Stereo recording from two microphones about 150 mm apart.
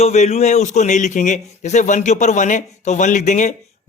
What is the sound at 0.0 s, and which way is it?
A man's voice, 45° left (ahead or behind).